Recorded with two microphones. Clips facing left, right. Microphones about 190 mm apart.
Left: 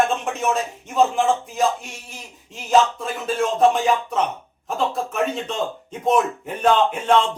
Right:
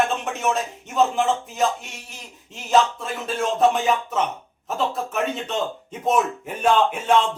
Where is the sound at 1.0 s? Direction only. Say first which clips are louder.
Left 2 dB; centre (ahead or behind).